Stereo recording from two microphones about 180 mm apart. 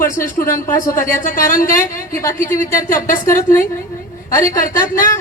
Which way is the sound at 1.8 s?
15° left (ahead or behind).